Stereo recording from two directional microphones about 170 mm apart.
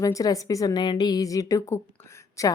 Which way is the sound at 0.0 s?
20° left (ahead or behind).